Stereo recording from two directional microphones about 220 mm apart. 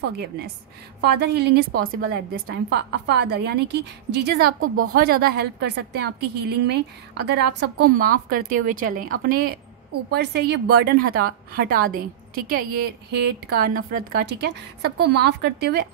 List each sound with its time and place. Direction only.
1.0 s a woman's voice: 50° right (ahead or behind)